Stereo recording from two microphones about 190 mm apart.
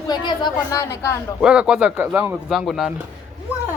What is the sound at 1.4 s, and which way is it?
Speech, 5° right (ahead or behind).